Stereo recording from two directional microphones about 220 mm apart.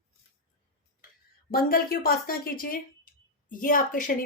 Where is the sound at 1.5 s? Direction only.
40° left (ahead or behind).